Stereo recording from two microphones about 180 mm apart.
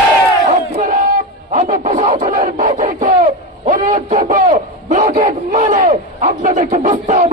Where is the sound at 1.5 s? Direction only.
40° right (ahead or behind).